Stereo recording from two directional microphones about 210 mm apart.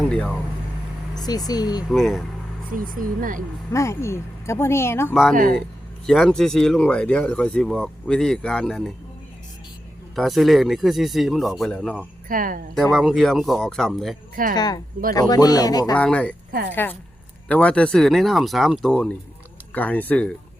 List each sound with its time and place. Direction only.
0.1 s speech: 5° left (ahead or behind)
1.1 s speech: 20° left (ahead or behind)
1.9 s speech: centre (ahead or behind)
2.7 s speech: 40° right (ahead or behind)
3.7 s speech: 15° left (ahead or behind)
5.3 s speech: 40° right (ahead or behind)
6.1 s speech: centre (ahead or behind)
10.2 s speech: centre (ahead or behind)
12.3 s speech: 40° right (ahead or behind)
12.7 s speech: centre (ahead or behind)
14.5 s speech: 20° left (ahead or behind)
16.0 s speech: 5° left (ahead or behind)
16.5 s a woman's voice: 45° right (ahead or behind)
16.7 s speech: 10° left (ahead or behind)